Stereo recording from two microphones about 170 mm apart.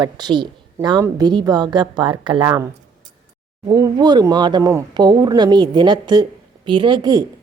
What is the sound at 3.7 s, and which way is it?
Speech, 25° right (ahead or behind).